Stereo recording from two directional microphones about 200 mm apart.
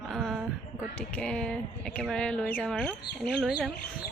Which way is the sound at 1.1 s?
5° left (ahead or behind).